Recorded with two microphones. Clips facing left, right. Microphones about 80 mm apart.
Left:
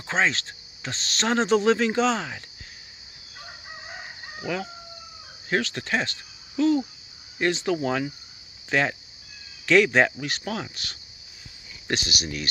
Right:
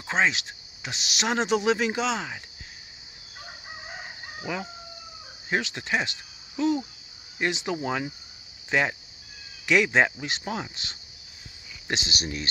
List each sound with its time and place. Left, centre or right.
0.0 s speech: centre
3.3 s crowing: centre
5.5 s speech: centre